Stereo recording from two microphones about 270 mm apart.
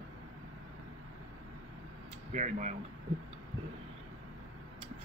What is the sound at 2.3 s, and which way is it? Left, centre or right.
Speech, right.